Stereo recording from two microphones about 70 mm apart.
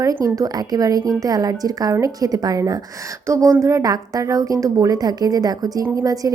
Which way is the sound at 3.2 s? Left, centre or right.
Right.